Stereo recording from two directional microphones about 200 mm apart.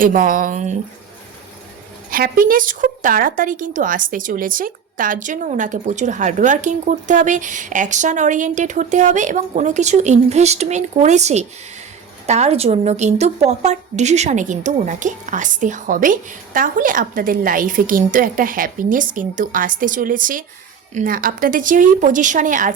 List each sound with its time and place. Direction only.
0.0 s speech: 45° right (ahead or behind)
2.0 s a woman's voice: 45° right (ahead or behind)